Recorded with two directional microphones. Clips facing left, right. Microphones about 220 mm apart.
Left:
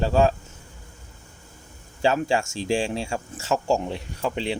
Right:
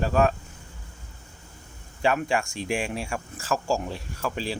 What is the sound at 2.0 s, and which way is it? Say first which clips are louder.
Speech: left 2 dB; 25° left (ahead or behind).